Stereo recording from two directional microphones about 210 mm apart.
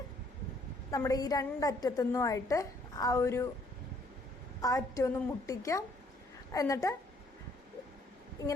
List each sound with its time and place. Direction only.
0.9 s a woman's voice: 15° left (ahead or behind)
4.6 s a woman's voice: 15° left (ahead or behind)